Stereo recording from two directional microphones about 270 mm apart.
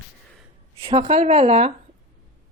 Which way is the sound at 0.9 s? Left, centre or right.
Right.